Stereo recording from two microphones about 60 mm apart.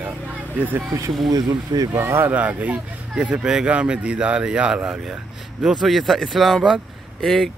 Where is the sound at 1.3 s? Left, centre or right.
Right.